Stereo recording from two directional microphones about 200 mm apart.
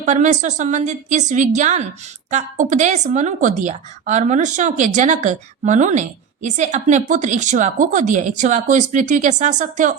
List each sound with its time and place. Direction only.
0.0 s a woman's voice: 35° right (ahead or behind)